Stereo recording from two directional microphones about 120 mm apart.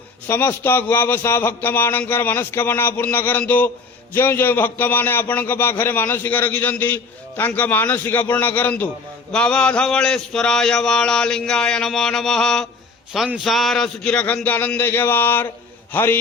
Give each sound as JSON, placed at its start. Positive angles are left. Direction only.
{"t": 0.3, "sound": "a man's voice", "side_deg": 20}